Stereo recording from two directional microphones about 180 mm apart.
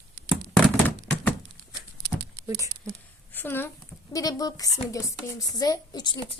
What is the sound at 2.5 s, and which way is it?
Speech, 20° right (ahead or behind).